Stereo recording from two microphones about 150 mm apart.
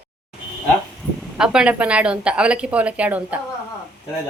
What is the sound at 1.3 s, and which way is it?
Speech, 5° right (ahead or behind).